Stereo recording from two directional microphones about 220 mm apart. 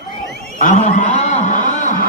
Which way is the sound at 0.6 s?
35° left (ahead or behind).